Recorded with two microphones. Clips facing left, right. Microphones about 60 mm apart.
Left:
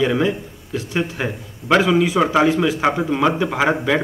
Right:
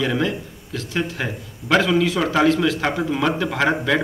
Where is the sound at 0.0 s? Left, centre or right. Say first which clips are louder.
Left 3 dB; centre.